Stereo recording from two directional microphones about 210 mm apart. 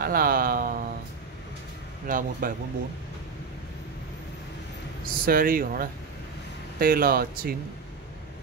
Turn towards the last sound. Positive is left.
turn(degrees=-45)  # may be behind; listen again after turning